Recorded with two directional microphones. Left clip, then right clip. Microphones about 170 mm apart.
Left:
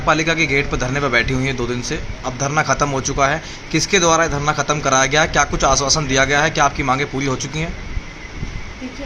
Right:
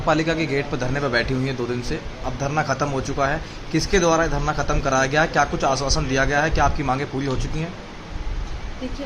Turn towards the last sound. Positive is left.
turn(degrees=20)  # may be behind; listen again after turning